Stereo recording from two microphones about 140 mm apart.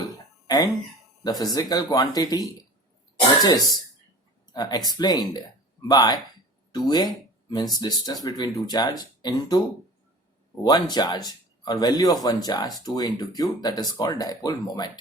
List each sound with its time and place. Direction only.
0.0 s cough: 30° left (ahead or behind)
1.2 s speech: 30° left (ahead or behind)
3.4 s speech: 25° left (ahead or behind)
10.6 s speech: 30° left (ahead or behind)